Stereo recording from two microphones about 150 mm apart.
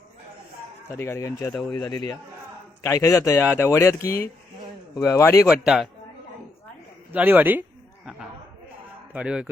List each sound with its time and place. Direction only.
0.9 s speech: 15° left (ahead or behind)
5.5 s a man's voice: 5° right (ahead or behind)
7.1 s speech: 10° right (ahead or behind)
9.1 s speech: 5° right (ahead or behind)